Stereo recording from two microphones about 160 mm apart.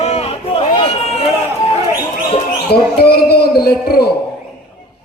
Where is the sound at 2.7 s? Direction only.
80° left.